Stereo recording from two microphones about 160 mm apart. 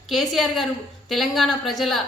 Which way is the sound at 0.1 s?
Centre (ahead or behind).